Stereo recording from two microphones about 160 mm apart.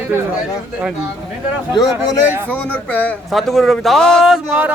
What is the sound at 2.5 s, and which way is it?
A man's voice, 10° left (ahead or behind).